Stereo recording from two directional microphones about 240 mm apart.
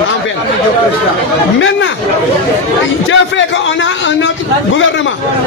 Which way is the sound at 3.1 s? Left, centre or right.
Left.